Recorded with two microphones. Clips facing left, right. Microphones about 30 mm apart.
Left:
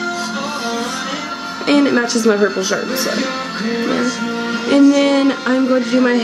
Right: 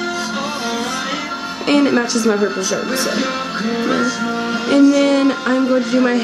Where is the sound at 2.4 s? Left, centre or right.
Centre.